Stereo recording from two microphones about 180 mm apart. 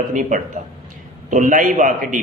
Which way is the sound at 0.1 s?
45° right (ahead or behind).